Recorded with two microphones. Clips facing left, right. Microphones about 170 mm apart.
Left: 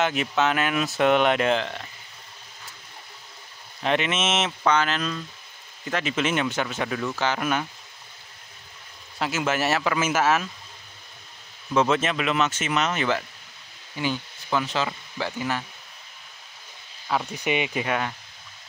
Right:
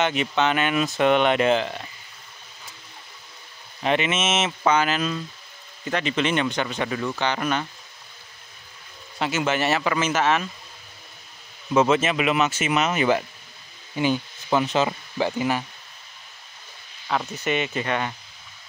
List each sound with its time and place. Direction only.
0.0 s speech: centre (ahead or behind)
3.8 s speech: centre (ahead or behind)
5.9 s speech: 5° left (ahead or behind)
9.2 s speech: centre (ahead or behind)
11.7 s speech: 5° right (ahead or behind)
17.1 s speech: 5° left (ahead or behind)
17.4 s speech: 15° left (ahead or behind)